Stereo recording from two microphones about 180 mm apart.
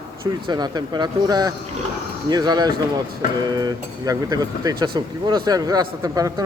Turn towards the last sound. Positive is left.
turn(degrees=-20)  # may be behind; listen again after turning